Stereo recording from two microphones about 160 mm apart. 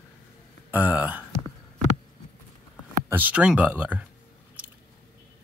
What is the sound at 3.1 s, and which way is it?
Speech, 10° right (ahead or behind).